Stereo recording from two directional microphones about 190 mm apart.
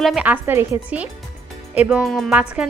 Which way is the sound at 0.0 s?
5° right (ahead or behind).